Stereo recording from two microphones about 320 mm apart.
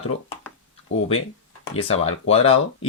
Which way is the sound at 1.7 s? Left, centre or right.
Centre.